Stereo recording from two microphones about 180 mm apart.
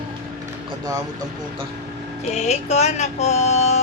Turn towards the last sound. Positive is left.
turn(degrees=35)  # may be behind; listen again after turning